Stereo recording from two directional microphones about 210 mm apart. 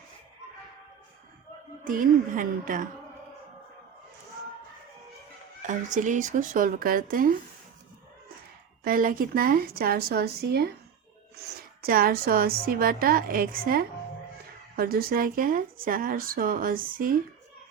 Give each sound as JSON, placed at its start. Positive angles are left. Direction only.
{"t": 1.8, "sound": "speech", "side_deg": -40}
{"t": 5.6, "sound": "speech", "side_deg": -35}
{"t": 8.8, "sound": "speech", "side_deg": -45}